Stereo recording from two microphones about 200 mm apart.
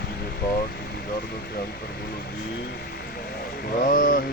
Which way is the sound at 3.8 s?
40° left (ahead or behind).